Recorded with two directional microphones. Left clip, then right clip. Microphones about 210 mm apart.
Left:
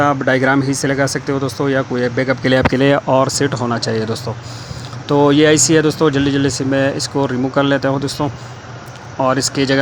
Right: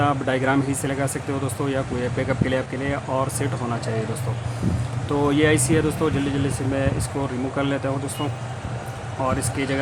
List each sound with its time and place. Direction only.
0.0 s speech: 25° left (ahead or behind)
9.2 s speech: 30° left (ahead or behind)